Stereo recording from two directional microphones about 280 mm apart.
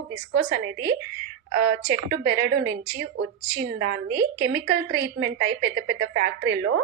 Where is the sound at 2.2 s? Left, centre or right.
Right.